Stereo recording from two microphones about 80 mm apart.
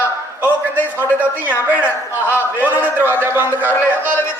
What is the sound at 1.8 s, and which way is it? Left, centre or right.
Speech, left.